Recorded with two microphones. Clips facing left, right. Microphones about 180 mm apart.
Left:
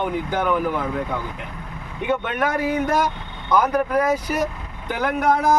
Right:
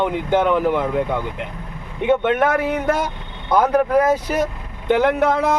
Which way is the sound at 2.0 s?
25° right (ahead or behind).